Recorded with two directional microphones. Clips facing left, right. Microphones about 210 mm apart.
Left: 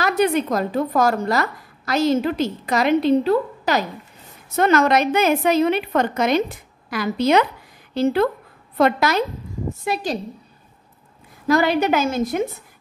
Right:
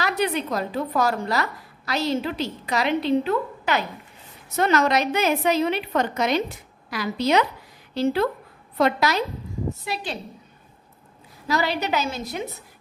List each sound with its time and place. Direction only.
0.0 s a woman's voice: 45° left (ahead or behind)
4.6 s a woman's voice: 50° left (ahead or behind)
11.4 s a woman's voice: 50° left (ahead or behind)